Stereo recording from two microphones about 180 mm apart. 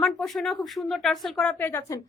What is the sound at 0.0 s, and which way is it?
Speech, centre (ahead or behind).